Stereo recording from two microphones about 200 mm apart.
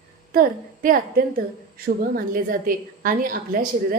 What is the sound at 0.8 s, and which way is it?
A woman's voice, 45° right (ahead or behind).